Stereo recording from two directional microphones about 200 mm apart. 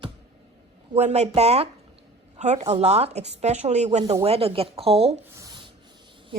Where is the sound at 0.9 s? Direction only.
35° right (ahead or behind).